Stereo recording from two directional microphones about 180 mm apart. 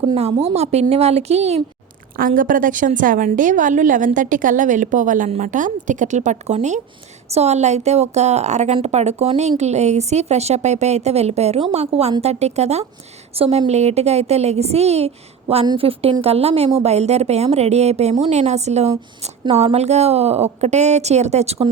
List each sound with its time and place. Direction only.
0.0 s a woman's voice: 30° right (ahead or behind)
2.1 s a woman's voice: 50° right (ahead or behind)